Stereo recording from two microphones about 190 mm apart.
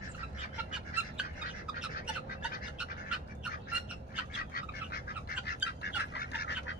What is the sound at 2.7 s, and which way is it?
Bird, 5° right (ahead or behind).